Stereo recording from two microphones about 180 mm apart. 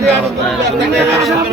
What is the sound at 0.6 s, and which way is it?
Speech, 75° right (ahead or behind).